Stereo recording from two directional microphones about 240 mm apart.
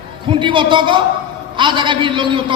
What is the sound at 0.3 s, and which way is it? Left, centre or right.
A man's voice, centre.